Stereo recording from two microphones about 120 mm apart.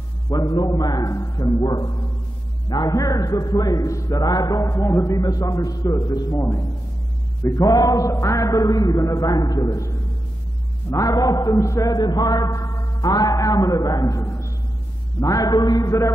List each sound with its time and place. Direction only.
0.3 s a man's voice: 35° left (ahead or behind)